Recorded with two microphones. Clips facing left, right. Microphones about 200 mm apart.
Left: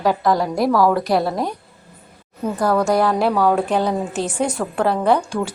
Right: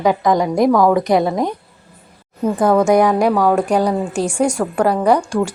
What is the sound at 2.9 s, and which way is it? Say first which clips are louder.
A woman's voice: right 4 dB; 15° right (ahead or behind).